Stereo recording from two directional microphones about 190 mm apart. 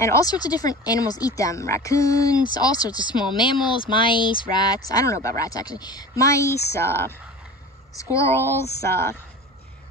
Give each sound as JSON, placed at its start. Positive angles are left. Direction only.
{"t": 0.0, "sound": "speech", "side_deg": 15}